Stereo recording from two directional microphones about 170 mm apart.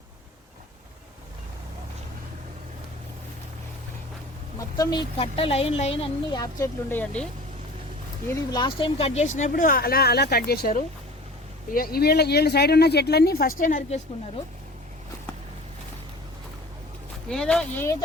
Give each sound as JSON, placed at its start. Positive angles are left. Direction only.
{"t": 4.8, "sound": "speech", "side_deg": 25}
{"t": 5.1, "sound": "speech", "side_deg": 35}
{"t": 6.4, "sound": "speech", "side_deg": 20}
{"t": 7.0, "sound": "speech", "side_deg": 5}
{"t": 8.3, "sound": "speech", "side_deg": 25}
{"t": 17.2, "sound": "speech", "side_deg": 5}